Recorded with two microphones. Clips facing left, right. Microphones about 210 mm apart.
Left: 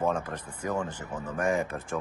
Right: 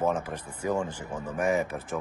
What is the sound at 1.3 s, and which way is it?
Speech, 20° right (ahead or behind).